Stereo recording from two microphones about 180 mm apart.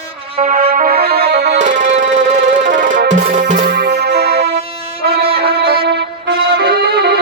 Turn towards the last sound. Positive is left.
turn(degrees=-60)  # may be behind; listen again after turning